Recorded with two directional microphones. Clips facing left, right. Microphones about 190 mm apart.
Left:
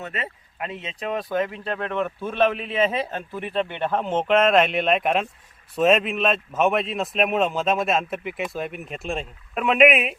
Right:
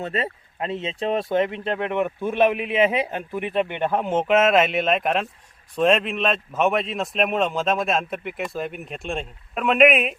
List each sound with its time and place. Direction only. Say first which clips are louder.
0.0 s speech: right 6 dB; 30° right (ahead or behind); by 10.2 s centre (ahead or behind)